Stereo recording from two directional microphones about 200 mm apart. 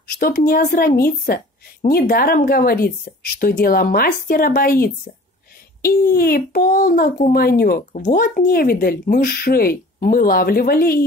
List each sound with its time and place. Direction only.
0.1 s a child's voice: 50° left (ahead or behind)